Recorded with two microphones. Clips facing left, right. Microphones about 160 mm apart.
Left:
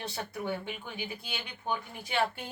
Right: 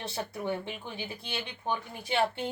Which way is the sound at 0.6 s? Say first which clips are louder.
Right 1 dB; 30° right (ahead or behind).